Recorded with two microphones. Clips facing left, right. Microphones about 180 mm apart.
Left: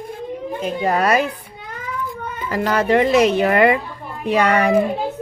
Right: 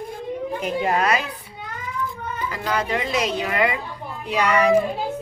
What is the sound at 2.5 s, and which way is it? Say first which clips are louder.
A woman's voice: left 8 dB; 60° left (ahead or behind).